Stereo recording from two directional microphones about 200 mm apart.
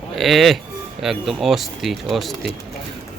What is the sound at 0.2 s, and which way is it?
Speech, centre (ahead or behind).